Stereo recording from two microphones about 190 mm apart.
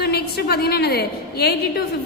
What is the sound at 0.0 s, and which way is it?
A woman's voice, 55° left (ahead or behind).